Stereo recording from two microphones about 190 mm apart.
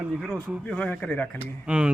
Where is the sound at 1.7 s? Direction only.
5° right (ahead or behind).